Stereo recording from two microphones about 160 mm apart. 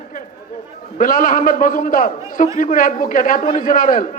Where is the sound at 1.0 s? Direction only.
55° left (ahead or behind).